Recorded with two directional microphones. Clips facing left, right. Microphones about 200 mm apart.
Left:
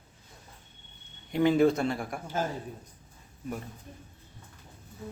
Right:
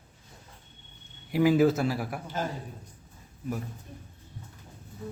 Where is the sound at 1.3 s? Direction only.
5° right (ahead or behind).